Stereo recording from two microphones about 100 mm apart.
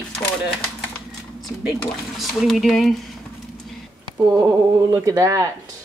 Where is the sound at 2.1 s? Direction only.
Centre (ahead or behind).